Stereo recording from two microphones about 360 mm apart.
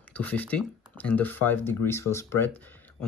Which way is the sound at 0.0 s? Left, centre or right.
Centre.